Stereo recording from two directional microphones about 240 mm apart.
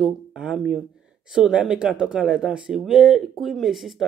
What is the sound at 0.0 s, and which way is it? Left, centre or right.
Speech, centre.